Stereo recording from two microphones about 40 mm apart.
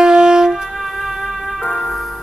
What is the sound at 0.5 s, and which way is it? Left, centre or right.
Music, centre.